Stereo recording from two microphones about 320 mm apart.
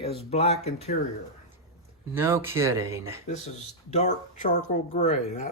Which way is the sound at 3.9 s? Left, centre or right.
Left.